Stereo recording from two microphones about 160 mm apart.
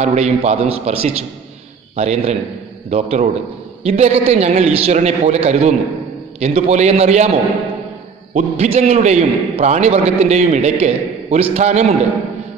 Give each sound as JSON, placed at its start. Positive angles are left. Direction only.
{"t": 0.0, "sound": "a man's voice", "side_deg": -45}
{"t": 8.4, "sound": "a man's voice", "side_deg": -40}